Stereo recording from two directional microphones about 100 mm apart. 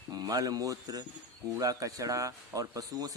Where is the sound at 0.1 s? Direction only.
40° right (ahead or behind).